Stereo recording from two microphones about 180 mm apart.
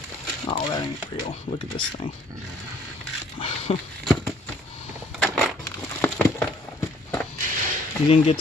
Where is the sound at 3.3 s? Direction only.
30° left (ahead or behind).